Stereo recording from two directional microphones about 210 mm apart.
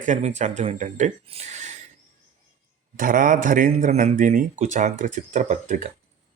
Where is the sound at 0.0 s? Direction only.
35° right (ahead or behind).